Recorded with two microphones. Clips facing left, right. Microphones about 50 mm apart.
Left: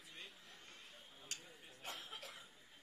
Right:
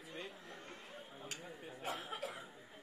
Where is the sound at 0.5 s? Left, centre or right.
Right.